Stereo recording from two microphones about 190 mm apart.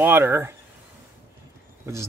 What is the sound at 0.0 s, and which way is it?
Speech, 10° right (ahead or behind).